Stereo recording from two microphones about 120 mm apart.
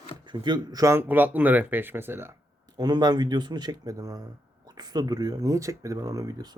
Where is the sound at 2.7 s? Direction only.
35° right (ahead or behind).